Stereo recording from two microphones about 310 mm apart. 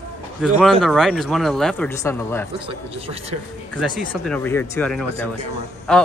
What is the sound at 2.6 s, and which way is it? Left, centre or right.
Speech, centre.